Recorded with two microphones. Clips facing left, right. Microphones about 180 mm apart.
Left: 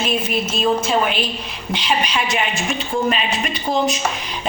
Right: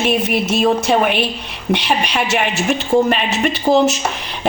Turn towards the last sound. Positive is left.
turn(degrees=-75)  # may be behind; listen again after turning